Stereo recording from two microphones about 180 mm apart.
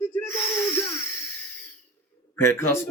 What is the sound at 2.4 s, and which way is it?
Speech, 15° left (ahead or behind).